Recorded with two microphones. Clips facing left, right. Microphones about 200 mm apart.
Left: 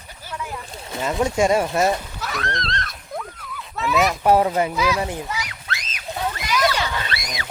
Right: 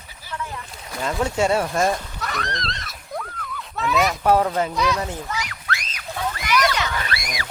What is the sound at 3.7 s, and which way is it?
Speech, centre (ahead or behind).